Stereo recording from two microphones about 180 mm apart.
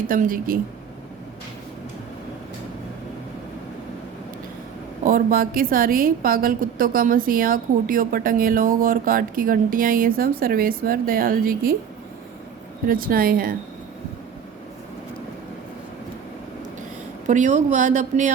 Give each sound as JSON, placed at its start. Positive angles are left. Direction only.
{"t": 0.1, "sound": "a woman's voice", "side_deg": -50}
{"t": 5.0, "sound": "a woman's voice", "side_deg": -55}
{"t": 12.9, "sound": "a woman's voice", "side_deg": -50}
{"t": 17.2, "sound": "a woman's voice", "side_deg": -45}